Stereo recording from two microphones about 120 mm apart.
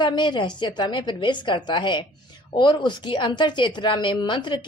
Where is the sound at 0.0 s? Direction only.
40° left (ahead or behind).